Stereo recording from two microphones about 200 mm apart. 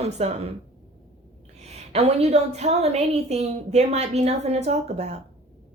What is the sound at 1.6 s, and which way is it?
A woman's voice, 35° right (ahead or behind).